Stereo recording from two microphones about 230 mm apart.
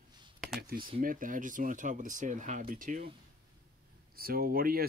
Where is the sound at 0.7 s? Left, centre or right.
Right.